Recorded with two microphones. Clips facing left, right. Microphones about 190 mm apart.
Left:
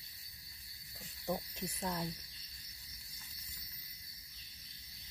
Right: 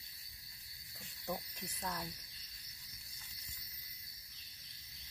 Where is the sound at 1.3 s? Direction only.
20° left (ahead or behind).